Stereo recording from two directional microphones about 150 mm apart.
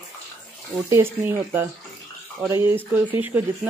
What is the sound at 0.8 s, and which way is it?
Speech, 15° right (ahead or behind).